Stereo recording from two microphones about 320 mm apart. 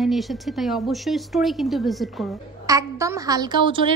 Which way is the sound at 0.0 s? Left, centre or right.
Centre.